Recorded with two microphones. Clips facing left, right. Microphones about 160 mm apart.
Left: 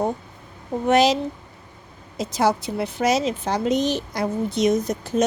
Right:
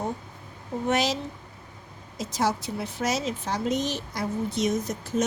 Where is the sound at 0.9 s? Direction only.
70° left (ahead or behind).